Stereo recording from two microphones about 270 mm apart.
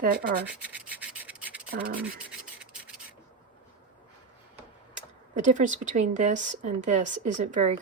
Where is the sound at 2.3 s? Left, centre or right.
Centre.